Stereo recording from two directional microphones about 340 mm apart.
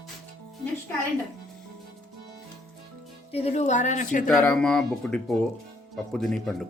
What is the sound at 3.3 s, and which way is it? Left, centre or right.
Speech, centre.